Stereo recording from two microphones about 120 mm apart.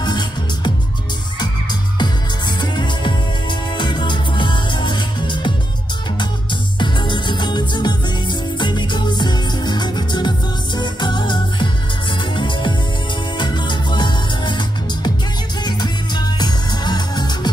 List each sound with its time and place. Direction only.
0.0 s music: 35° left (ahead or behind)
1.4 s music: 40° left (ahead or behind)
6.8 s music: 40° left (ahead or behind)
15.6 s music: 35° left (ahead or behind)